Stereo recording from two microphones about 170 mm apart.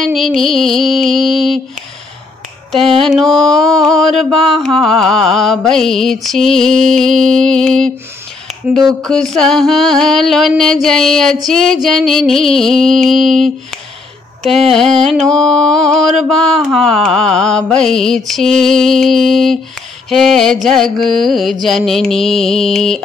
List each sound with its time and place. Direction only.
0.0 s mantra: centre (ahead or behind)
3.0 s mantra: centre (ahead or behind)
9.0 s mantra: 5° left (ahead or behind)